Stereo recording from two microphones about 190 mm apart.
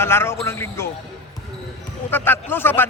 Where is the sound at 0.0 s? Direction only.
15° left (ahead or behind).